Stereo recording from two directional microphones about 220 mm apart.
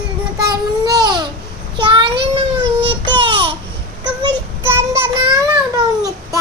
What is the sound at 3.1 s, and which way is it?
Babbling, 25° right (ahead or behind).